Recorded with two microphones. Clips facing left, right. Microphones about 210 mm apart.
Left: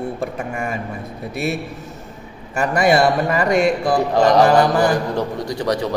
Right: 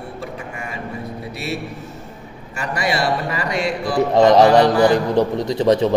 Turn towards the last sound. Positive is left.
turn(degrees=-25)  # may be behind; listen again after turning